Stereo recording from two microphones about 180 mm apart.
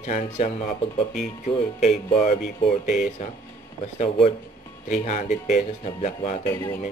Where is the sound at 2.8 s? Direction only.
5° right (ahead or behind).